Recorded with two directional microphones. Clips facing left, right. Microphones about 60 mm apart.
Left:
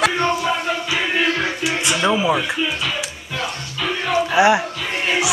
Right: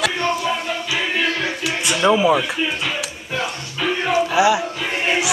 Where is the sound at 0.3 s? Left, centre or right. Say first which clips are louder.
Left 1 dB; centre.